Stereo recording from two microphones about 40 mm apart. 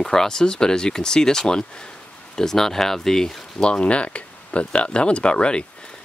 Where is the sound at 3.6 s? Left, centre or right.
Left.